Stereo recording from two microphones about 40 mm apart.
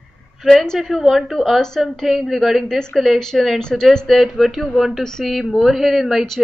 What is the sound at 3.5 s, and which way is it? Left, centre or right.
Speech, centre.